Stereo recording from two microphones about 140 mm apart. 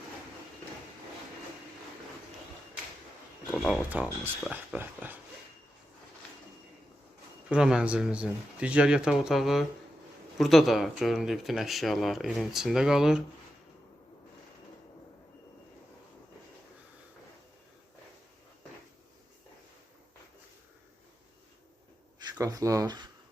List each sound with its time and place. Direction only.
3.4 s speech: 5° left (ahead or behind)
4.8 s a sound: 10° right (ahead or behind)
7.4 s speech: 5° right (ahead or behind)
22.4 s speech: 25° right (ahead or behind)